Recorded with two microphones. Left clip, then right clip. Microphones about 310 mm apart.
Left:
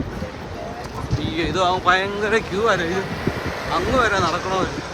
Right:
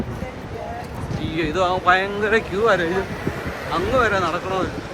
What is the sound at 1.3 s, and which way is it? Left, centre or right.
Speech, centre.